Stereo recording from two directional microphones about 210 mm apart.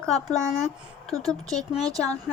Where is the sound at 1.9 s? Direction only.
15° right (ahead or behind).